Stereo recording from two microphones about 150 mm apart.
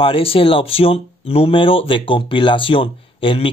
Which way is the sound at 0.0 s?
40° left (ahead or behind).